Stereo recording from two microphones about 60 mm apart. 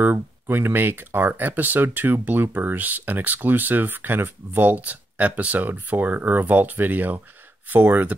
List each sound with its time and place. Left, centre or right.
0.0 s speech: right